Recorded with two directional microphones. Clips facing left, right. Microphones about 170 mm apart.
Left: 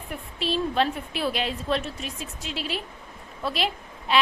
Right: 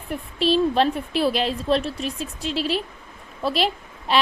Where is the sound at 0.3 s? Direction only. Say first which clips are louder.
Right 6 dB; 35° right (ahead or behind).